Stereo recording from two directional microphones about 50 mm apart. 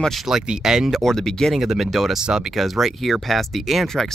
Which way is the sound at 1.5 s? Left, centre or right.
Centre.